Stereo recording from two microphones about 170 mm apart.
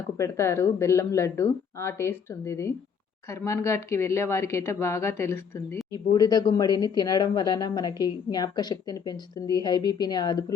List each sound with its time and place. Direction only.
0.2 s speech: 15° left (ahead or behind)